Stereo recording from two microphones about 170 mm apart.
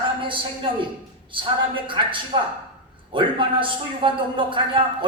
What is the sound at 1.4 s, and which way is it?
A man's voice, 30° right (ahead or behind).